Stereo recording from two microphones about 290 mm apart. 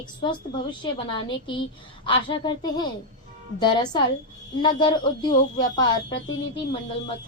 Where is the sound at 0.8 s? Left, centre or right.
Centre.